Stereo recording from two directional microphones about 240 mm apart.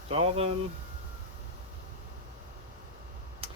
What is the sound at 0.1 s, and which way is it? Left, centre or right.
Speech, right.